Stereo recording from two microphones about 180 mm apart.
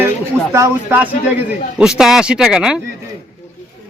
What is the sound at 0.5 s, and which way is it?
Speech, 15° right (ahead or behind).